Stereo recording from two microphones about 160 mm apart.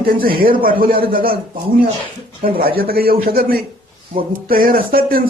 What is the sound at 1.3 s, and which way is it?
Speech, 35° right (ahead or behind).